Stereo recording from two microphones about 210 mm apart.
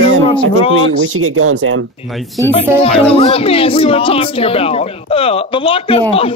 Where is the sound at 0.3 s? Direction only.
25° left (ahead or behind).